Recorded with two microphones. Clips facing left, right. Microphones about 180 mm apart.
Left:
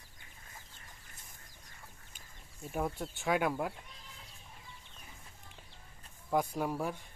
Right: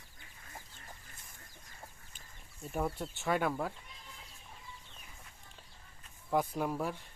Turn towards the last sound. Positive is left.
turn(degrees=0)  # may be behind; listen again after turning